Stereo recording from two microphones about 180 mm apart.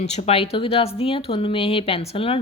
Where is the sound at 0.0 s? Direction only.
40° left (ahead or behind).